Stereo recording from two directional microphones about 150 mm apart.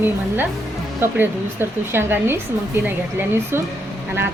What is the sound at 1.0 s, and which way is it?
A woman's voice, 15° right (ahead or behind).